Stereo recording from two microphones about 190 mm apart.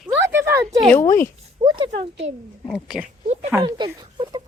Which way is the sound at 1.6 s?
25° right (ahead or behind).